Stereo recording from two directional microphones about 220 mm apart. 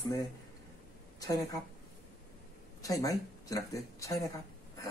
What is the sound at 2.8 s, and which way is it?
Speech, 15° left (ahead or behind).